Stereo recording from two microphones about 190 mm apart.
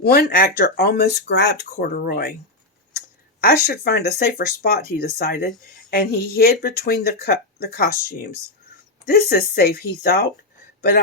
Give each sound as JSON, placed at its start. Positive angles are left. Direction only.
{"t": 0.0, "sound": "speech", "side_deg": 55}
{"t": 3.4, "sound": "speech", "side_deg": 55}
{"t": 10.8, "sound": "a sound", "side_deg": 55}